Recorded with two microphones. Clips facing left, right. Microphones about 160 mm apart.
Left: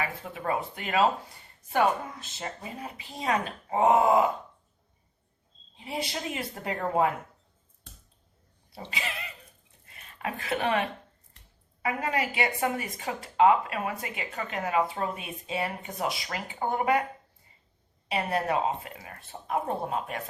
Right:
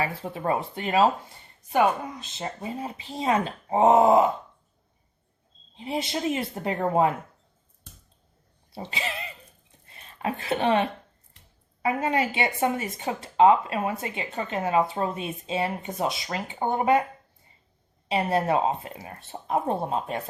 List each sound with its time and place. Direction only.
0.0 s speech: 30° right (ahead or behind)
1.7 s speech: 20° right (ahead or behind)
5.7 s speech: 25° right (ahead or behind)
8.9 s speech: 30° right (ahead or behind)
9.8 s a sound: 30° right (ahead or behind)
11.8 s speech: 25° right (ahead or behind)
18.1 s speech: 25° right (ahead or behind)